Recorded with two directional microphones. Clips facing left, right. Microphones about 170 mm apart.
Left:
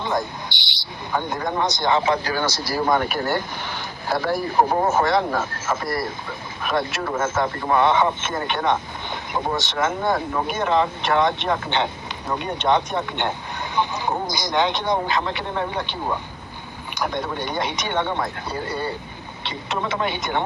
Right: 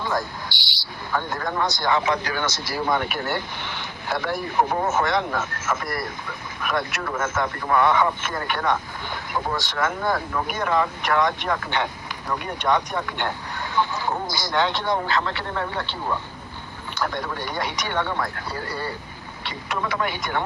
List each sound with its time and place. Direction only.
0.0 s speech: 20° left (ahead or behind)